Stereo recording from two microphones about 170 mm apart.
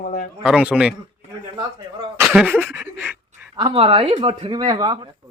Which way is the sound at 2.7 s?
5° right (ahead or behind).